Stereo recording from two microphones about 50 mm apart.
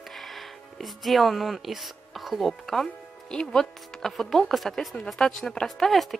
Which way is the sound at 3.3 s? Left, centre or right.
Centre.